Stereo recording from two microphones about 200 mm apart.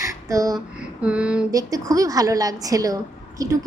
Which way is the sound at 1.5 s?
20° right (ahead or behind).